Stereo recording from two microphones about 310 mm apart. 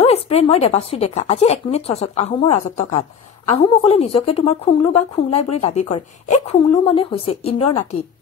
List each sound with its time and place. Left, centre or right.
0.0 s a woman's voice: centre